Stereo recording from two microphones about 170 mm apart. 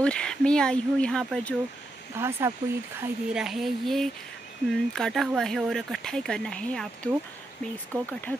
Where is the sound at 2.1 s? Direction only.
15° right (ahead or behind).